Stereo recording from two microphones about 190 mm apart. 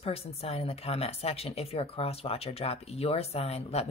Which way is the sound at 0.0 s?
30° left (ahead or behind).